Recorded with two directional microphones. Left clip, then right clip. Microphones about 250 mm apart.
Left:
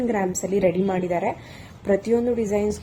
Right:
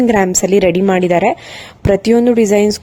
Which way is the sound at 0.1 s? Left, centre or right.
Right.